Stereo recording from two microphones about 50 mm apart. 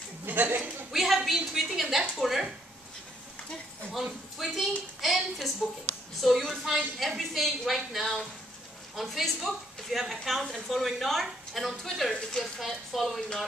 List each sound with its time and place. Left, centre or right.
0.2 s speech: right
0.9 s a sound: centre
2.1 s a woman's voice: centre
4.4 s a woman's voice: centre
12.1 s speech: centre
12.5 s a woman's voice: centre